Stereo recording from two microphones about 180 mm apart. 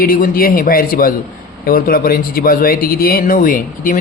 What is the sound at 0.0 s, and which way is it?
A man's voice, 50° left (ahead or behind).